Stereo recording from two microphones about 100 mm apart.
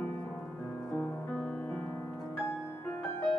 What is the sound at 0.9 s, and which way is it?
Music, 20° left (ahead or behind).